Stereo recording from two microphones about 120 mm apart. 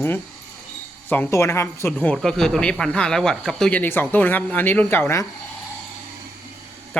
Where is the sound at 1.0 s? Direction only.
15° left (ahead or behind).